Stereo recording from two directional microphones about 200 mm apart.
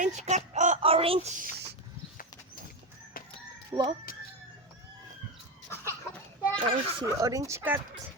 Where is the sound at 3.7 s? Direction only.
25° right (ahead or behind).